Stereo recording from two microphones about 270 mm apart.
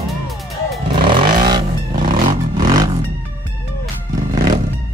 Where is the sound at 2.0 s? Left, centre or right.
Right.